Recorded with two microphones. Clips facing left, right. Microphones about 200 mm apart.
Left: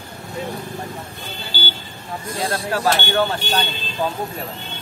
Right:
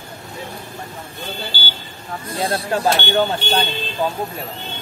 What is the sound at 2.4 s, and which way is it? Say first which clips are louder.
Speech: right 2 dB; 20° right (ahead or behind).